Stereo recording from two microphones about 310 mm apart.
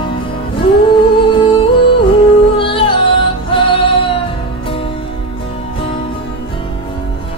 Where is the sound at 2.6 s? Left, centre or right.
Centre.